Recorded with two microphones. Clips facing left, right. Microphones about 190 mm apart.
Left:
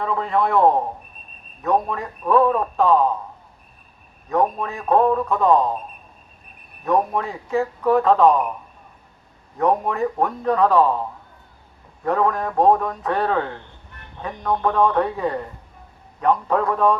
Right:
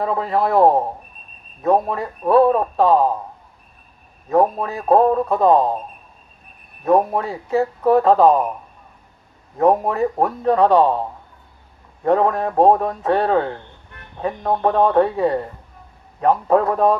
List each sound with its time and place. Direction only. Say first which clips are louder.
0.0 s speech: right 2 dB; 35° right (ahead or behind)
4.3 s speech: right 4 dB; 35° right (ahead or behind)
6.8 s speech: right 4 dB; 35° right (ahead or behind)
9.6 s speech: right 4 dB; 35° right (ahead or behind)
12.0 s speech: right 4 dB; 35° right (ahead or behind)
14.4 s speech: right 2 dB; 35° right (ahead or behind)
16.5 s speech: right 3 dB; 40° right (ahead or behind)